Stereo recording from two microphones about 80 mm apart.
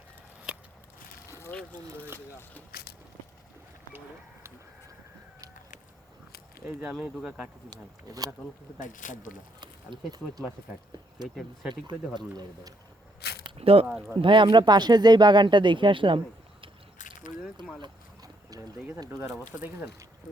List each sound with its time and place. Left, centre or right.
1.3 s a sound: left
1.5 s speech: centre
6.7 s speech: centre
7.7 s speech: right
9.6 s speech: right
11.7 s speech: right
13.8 s speech: right
14.3 s speech: right
17.7 s boat: right
19.5 s speech: right